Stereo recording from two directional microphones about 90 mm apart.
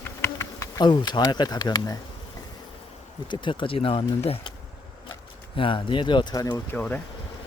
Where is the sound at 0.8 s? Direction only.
55° left (ahead or behind).